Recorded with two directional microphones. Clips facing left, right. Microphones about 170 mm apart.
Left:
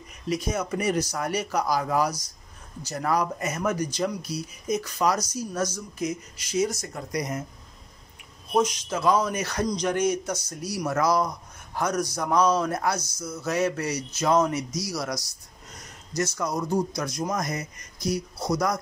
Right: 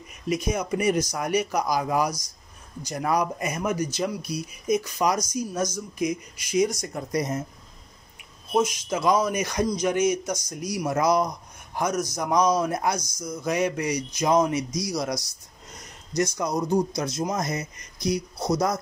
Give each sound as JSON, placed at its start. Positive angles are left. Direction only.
{"t": 0.3, "sound": "speech", "side_deg": -10}
{"t": 8.5, "sound": "speech", "side_deg": -10}
{"t": 16.2, "sound": "speech", "side_deg": -20}